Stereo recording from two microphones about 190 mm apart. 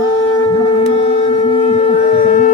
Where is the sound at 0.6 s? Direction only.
30° left (ahead or behind).